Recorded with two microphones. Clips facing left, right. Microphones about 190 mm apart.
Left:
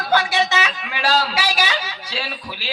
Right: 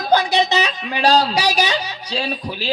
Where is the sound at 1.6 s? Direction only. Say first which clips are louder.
Right 3 dB; 20° right (ahead or behind).